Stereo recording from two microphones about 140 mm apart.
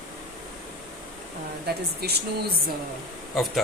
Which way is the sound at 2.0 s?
90° right.